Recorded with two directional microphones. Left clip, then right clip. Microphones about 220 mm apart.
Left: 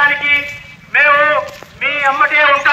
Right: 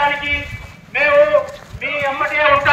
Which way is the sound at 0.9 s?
5° right (ahead or behind).